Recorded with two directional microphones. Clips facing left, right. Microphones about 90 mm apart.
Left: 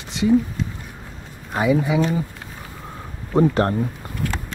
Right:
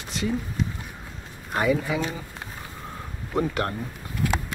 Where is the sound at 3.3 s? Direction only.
30° left (ahead or behind).